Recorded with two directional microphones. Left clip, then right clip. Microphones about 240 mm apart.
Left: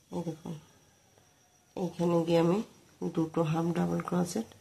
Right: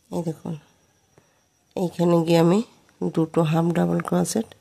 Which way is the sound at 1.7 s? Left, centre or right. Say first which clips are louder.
Right 9 dB; right.